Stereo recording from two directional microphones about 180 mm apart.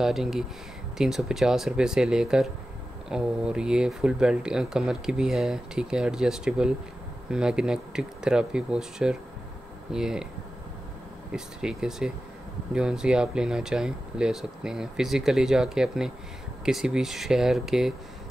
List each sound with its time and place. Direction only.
0.0 s speech: centre (ahead or behind)
11.3 s speech: 5° right (ahead or behind)